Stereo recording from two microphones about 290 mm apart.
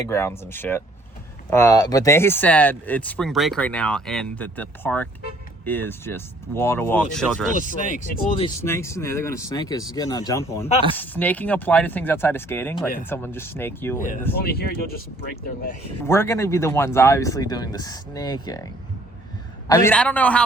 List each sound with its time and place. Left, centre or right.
0.1 s speech: centre
7.9 s speech: left
8.4 s speech: centre
14.4 s speech: left
16.0 s speech: centre
19.6 s speech: centre